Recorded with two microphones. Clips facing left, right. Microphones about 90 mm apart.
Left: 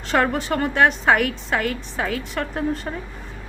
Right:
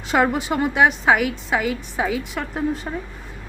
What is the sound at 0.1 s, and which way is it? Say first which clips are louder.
A woman's voice: right 1 dB; 10° right (ahead or behind).